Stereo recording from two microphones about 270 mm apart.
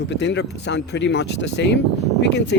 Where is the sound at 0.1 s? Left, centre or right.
Left.